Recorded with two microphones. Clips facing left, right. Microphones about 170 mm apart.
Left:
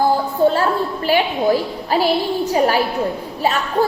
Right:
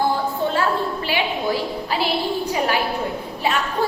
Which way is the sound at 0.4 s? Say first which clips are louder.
Left 11 dB; 40° left (ahead or behind).